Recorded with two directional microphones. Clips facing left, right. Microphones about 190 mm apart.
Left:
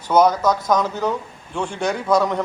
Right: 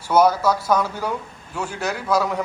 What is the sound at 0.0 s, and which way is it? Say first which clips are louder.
A man's voice: left 1 dB; 10° right (ahead or behind).